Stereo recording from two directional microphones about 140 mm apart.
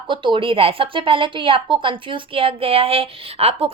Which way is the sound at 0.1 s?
35° right (ahead or behind).